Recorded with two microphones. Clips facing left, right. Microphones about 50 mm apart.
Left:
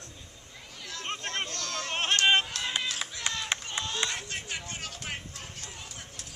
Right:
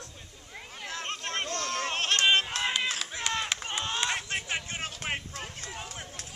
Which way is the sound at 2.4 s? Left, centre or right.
Right.